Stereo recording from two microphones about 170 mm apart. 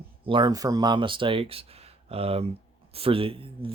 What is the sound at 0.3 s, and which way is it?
Speech, 25° right (ahead or behind).